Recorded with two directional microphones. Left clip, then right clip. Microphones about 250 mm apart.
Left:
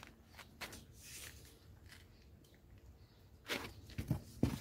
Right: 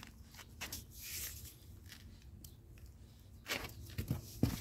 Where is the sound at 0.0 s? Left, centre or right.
Centre.